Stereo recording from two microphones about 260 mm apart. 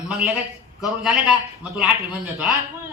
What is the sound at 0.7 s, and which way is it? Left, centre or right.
A woman's voice, centre.